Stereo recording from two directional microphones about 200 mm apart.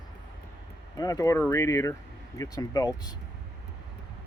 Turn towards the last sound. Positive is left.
turn(degrees=20)  # may be behind; listen again after turning